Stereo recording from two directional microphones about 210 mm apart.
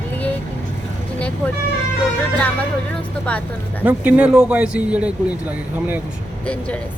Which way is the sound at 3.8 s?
5° right (ahead or behind).